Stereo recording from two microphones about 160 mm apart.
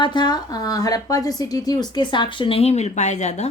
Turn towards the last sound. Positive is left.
turn(degrees=45)  # may be behind; listen again after turning